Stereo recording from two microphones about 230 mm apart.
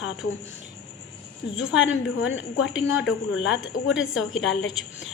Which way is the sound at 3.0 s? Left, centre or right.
Left.